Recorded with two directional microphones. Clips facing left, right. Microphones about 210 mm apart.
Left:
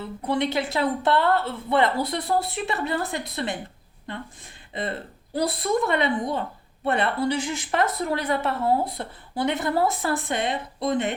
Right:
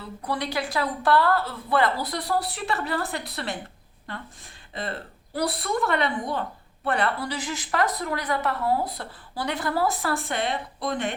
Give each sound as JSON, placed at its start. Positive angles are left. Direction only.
{"t": 0.3, "sound": "speech", "side_deg": 25}
{"t": 4.7, "sound": "speech", "side_deg": 20}